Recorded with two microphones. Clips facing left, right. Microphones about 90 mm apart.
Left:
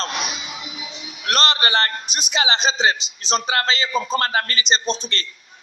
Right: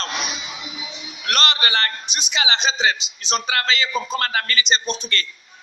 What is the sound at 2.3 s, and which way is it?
A man's voice, 40° left (ahead or behind).